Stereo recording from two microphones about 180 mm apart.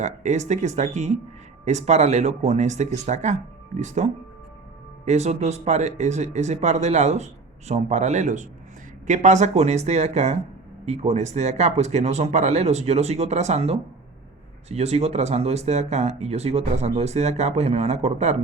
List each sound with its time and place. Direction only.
0.0 s speech: 40° right (ahead or behind)